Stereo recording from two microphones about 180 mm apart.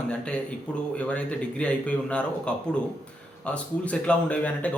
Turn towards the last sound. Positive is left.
turn(degrees=5)  # may be behind; listen again after turning